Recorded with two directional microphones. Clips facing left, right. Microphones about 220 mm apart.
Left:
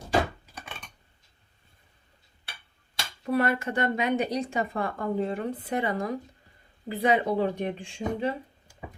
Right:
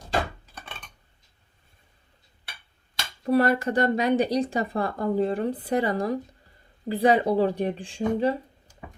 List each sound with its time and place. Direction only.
3.2 s speech: 35° right (ahead or behind)